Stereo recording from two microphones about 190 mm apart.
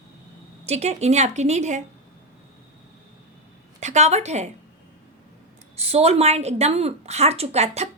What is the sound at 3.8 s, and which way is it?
Speech, 40° right (ahead or behind).